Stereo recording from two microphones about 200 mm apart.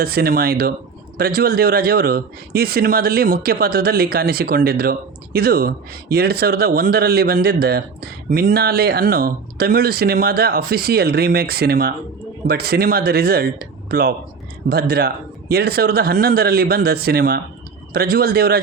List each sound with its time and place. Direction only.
0.0 s a man's voice: 50° right (ahead or behind)